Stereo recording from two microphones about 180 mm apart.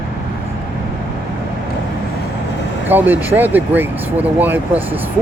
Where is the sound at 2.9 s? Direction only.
10° right (ahead or behind).